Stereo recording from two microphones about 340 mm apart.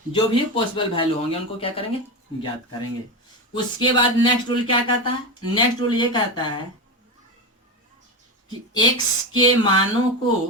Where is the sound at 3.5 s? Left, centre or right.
Centre.